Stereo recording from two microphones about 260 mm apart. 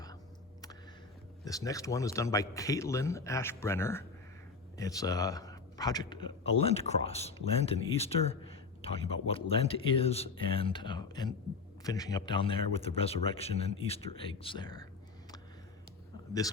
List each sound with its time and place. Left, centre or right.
1.5 s speech: centre